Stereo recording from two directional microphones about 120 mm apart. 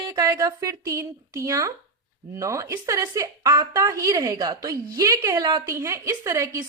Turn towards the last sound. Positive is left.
turn(degrees=-25)  # may be behind; listen again after turning